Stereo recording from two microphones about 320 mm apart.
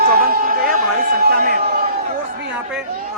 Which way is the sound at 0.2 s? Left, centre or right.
Right.